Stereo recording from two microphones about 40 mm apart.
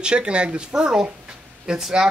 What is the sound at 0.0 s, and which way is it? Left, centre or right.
Speech, right.